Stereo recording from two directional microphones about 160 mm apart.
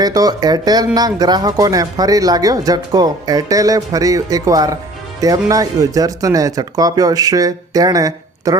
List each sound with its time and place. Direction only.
0.0 s speech: 25° right (ahead or behind)